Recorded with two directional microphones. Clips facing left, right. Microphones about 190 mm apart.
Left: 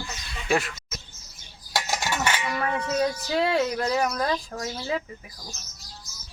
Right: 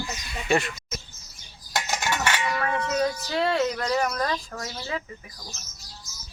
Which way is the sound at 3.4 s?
5° left (ahead or behind).